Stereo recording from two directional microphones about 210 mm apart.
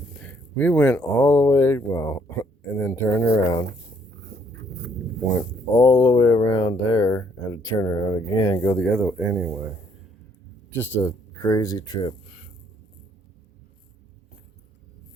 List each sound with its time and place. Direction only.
0.2 s speech: 5° left (ahead or behind)
4.3 s a sound: 50° right (ahead or behind)
5.7 s speech: 10° left (ahead or behind)
10.7 s speech: 10° left (ahead or behind)